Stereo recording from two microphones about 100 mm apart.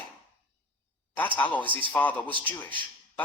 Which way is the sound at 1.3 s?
15° left (ahead or behind).